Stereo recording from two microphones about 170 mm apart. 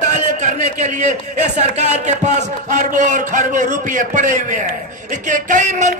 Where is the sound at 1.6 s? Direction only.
40° right (ahead or behind).